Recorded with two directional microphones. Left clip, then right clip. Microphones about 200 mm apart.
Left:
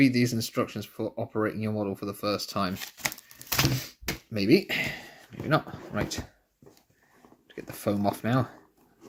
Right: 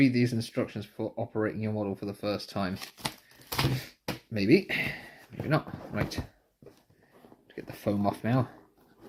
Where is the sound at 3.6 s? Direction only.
40° left (ahead or behind).